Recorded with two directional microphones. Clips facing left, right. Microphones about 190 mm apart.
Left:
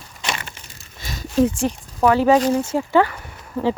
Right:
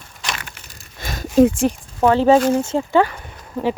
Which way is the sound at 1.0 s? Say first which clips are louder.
Right 5 dB; 55° right (ahead or behind).